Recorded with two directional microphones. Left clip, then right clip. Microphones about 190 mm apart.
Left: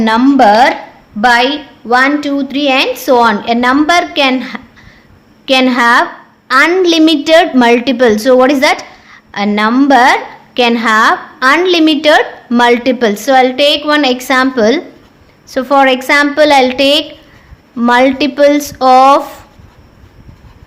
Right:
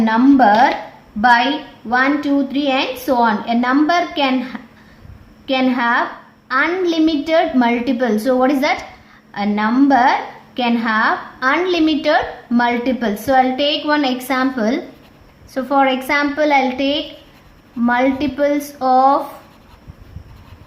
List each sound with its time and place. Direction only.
0.0 s a woman's voice: 45° left (ahead or behind)